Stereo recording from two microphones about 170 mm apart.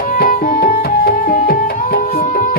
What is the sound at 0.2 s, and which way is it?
Tabla, 60° left (ahead or behind).